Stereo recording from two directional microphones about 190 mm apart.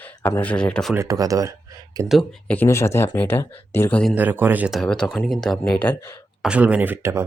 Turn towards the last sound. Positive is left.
turn(degrees=-10)  # may be behind; listen again after turning